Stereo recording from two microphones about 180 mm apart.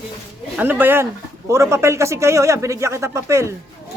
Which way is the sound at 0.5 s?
10° right (ahead or behind).